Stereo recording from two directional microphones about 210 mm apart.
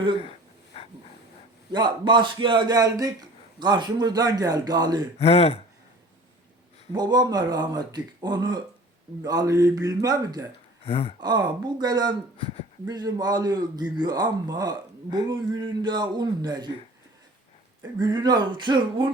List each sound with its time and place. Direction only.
0.2 s a sound: 30° left (ahead or behind)
1.7 s a man's voice: 20° right (ahead or behind)
5.2 s speech: 30° left (ahead or behind)
6.9 s a man's voice: 20° right (ahead or behind)
10.8 s speech: 25° left (ahead or behind)
11.2 s a man's voice: 20° right (ahead or behind)
18.0 s a man's voice: 20° right (ahead or behind)